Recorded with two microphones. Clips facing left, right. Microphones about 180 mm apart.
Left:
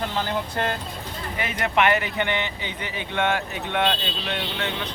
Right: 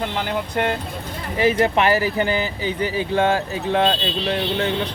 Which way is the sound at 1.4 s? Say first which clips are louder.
Right 6 dB; 30° right (ahead or behind).